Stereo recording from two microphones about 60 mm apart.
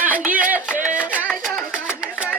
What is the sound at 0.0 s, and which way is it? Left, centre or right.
Speech, right.